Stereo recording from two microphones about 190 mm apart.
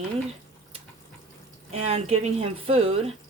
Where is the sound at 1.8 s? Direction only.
30° right (ahead or behind).